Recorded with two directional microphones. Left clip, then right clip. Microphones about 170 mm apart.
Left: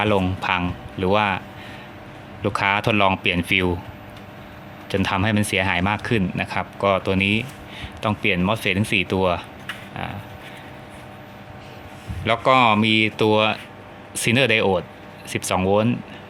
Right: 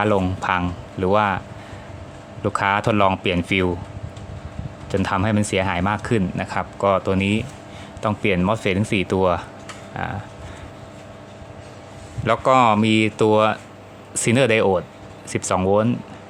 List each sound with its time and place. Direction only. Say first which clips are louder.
0.0 s speech: right 1 dB; 5° right (ahead or behind)
2.4 s speech: right 1 dB; 5° right (ahead or behind)
4.9 s speech: even; centre (ahead or behind)
12.2 s speech: right 1 dB; 5° right (ahead or behind)